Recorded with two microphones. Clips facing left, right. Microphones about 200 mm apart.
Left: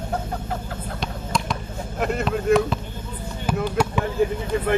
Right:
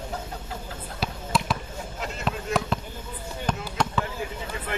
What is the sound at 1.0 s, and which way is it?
Basketball bounce, 5° right (ahead or behind).